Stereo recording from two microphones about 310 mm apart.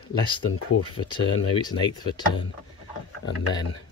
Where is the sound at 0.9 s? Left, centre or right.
Centre.